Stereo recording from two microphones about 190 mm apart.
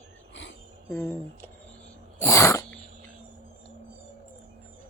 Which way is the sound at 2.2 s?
15° left (ahead or behind).